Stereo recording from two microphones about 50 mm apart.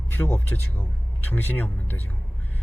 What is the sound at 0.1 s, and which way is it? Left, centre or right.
Speech, left.